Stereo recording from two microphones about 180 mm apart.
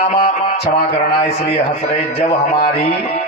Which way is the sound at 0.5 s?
40° left (ahead or behind).